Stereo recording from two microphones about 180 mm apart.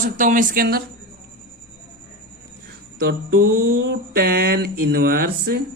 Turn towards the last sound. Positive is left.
turn(degrees=-55)  # may be behind; listen again after turning